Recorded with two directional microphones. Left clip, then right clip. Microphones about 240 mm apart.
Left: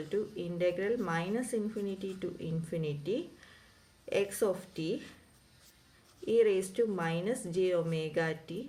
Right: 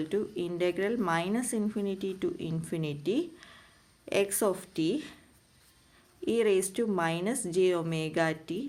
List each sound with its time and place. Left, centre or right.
0.1 s speech: right
6.2 s speech: right